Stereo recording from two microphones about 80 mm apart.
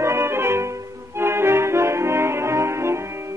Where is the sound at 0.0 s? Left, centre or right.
Right.